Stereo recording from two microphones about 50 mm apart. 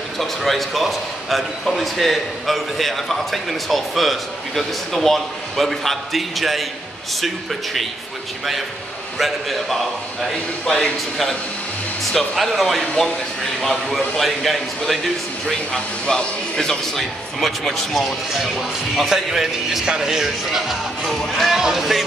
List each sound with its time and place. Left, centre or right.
0.2 s speech: centre
9.2 s speech: centre
10.3 s a man's voice: centre
12.0 s a man's voice: centre
13.9 s speech: centre
15.7 s a man's voice: centre
18.0 s a man's voice: centre